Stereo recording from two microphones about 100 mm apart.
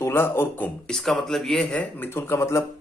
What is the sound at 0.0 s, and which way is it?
Speech, 20° left (ahead or behind).